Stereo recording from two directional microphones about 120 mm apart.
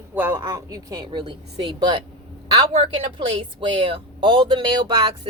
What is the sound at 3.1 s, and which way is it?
Speech, 40° right (ahead or behind).